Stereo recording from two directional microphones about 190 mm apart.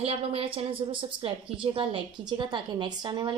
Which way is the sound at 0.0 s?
30° right (ahead or behind).